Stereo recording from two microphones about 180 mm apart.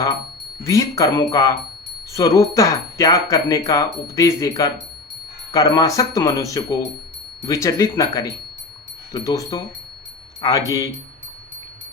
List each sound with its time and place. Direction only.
0.6 s speech: 15° left (ahead or behind)